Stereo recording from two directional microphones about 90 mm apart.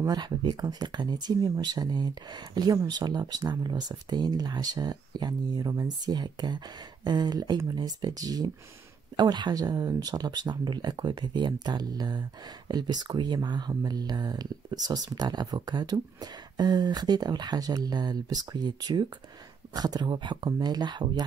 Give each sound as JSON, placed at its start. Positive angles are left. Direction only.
{"t": 0.0, "sound": "speech", "side_deg": -50}
{"t": 9.1, "sound": "speech", "side_deg": -55}